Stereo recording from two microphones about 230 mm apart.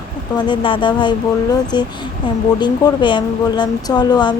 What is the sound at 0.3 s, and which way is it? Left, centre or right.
Speech, centre.